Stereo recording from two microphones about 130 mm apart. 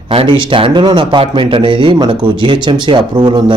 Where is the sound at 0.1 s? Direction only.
45° right (ahead or behind).